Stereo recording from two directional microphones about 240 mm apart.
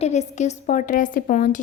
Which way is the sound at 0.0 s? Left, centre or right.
Left.